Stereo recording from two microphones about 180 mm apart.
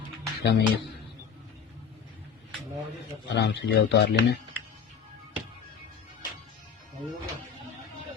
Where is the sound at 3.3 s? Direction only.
70° left (ahead or behind).